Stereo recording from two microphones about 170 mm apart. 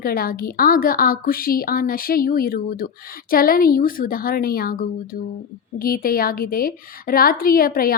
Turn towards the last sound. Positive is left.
turn(degrees=60)  # may be behind; listen again after turning